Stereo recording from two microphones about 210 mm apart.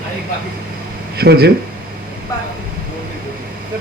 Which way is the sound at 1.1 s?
50° right (ahead or behind).